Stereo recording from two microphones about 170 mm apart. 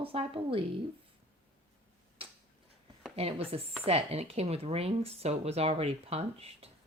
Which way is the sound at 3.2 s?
35° right (ahead or behind).